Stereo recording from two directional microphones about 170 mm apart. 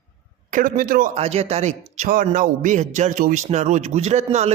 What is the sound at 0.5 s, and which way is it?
Speech, 55° right (ahead or behind).